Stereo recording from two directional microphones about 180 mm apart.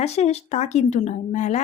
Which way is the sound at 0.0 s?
35° left (ahead or behind).